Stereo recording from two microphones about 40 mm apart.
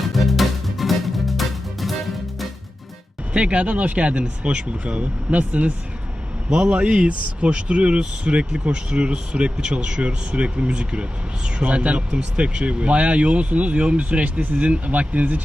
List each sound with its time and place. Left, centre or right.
0.0 s music: centre
3.3 s speech: right
4.6 s speech: right